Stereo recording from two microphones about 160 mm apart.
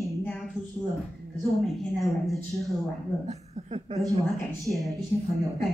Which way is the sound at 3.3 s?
45° right (ahead or behind).